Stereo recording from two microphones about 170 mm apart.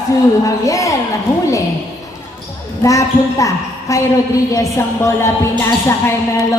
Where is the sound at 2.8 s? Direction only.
20° left (ahead or behind).